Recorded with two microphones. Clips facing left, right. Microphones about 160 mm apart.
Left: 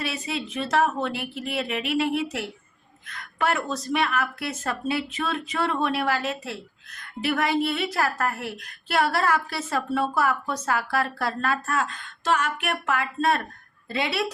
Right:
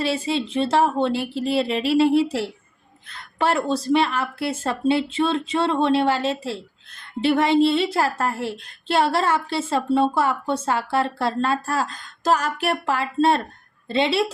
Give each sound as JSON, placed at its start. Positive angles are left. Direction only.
{"t": 0.0, "sound": "a woman's voice", "side_deg": -30}